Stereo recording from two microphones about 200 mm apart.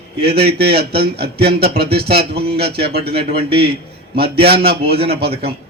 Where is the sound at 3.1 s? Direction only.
30° right (ahead or behind).